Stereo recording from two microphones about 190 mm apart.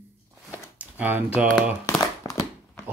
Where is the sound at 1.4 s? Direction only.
5° right (ahead or behind).